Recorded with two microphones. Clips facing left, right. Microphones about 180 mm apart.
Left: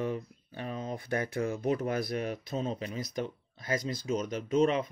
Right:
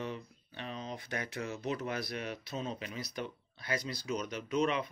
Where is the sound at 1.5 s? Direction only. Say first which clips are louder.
Left 5 dB; 50° left (ahead or behind).